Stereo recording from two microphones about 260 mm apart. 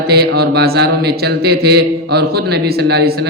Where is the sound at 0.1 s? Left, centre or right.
Right.